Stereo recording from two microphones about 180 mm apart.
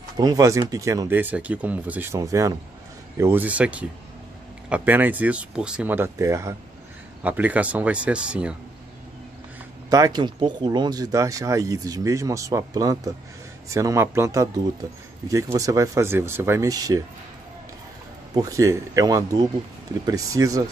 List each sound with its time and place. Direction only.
0.2 s speech: 20° right (ahead or behind)
9.8 s speech: 20° right (ahead or behind)
18.3 s speech: 20° right (ahead or behind)